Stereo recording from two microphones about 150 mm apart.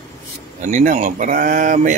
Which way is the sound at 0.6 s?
55° right (ahead or behind).